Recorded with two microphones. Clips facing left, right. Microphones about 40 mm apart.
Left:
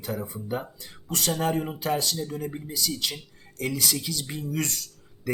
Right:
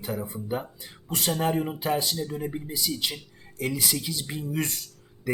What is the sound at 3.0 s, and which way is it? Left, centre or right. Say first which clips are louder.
Speech: even; centre.